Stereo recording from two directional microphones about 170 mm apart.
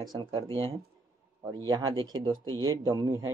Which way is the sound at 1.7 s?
25° right (ahead or behind).